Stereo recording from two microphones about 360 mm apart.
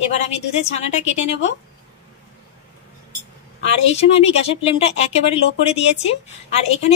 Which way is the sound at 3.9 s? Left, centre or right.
Centre.